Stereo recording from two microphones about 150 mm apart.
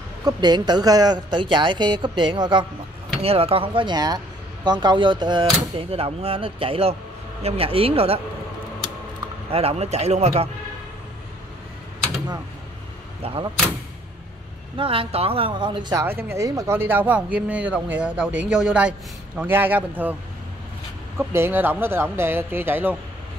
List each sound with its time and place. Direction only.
0.2 s a woman's voice: 30° right (ahead or behind)
3.2 s speech: 40° right (ahead or behind)
9.5 s a man's voice: 40° right (ahead or behind)
13.2 s speech: 40° right (ahead or behind)
14.8 s speech: 40° right (ahead or behind)
16.0 s speech: 15° right (ahead or behind)
21.2 s speech: 15° right (ahead or behind)